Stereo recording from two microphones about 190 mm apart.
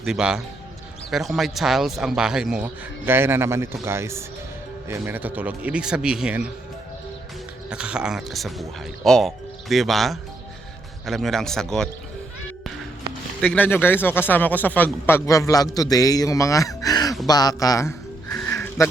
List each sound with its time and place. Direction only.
0.0 s a man's voice: 5° right (ahead or behind)
7.7 s speech: 5° right (ahead or behind)
13.4 s speech: 5° left (ahead or behind)
18.4 s a sound: 15° left (ahead or behind)